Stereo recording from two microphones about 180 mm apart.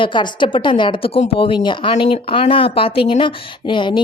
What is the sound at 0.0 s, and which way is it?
A woman's voice, 25° left (ahead or behind).